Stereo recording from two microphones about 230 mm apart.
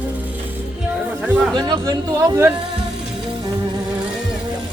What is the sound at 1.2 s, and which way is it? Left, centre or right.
Speech, centre.